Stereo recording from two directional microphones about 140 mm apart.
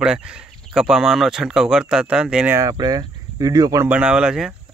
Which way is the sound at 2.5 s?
25° right (ahead or behind).